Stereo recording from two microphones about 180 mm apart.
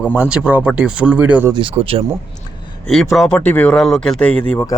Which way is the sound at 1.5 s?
30° right (ahead or behind).